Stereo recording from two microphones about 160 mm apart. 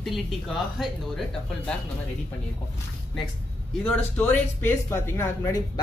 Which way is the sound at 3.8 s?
10° left (ahead or behind).